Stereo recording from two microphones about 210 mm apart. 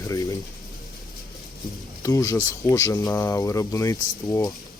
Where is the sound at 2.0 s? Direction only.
15° left (ahead or behind).